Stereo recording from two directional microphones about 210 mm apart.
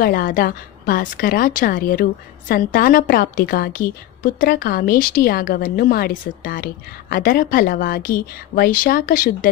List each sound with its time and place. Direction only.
0.0 s a woman's voice: 40° left (ahead or behind)